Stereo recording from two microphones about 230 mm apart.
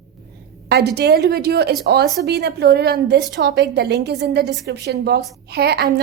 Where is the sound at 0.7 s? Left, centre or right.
Right.